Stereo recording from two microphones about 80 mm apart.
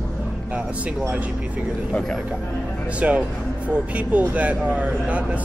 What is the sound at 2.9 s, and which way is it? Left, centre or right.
Speech, centre.